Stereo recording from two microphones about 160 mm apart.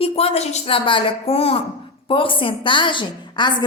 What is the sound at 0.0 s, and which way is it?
A woman's voice, 35° left (ahead or behind).